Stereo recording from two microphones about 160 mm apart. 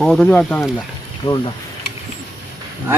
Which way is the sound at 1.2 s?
20° left (ahead or behind).